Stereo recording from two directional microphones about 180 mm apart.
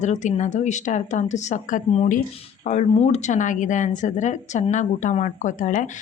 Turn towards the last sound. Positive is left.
turn(degrees=45)  # may be behind; listen again after turning